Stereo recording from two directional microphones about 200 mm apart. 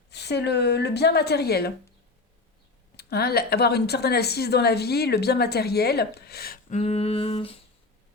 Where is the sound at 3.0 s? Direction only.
50° left (ahead or behind); by 7.5 s 30° left (ahead or behind).